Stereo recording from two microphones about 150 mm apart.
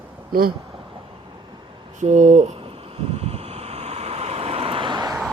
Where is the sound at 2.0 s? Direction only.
55° right (ahead or behind).